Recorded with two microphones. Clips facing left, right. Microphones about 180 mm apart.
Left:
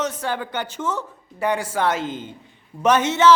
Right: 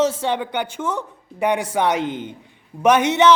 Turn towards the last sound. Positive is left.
turn(degrees=-15)  # may be behind; listen again after turning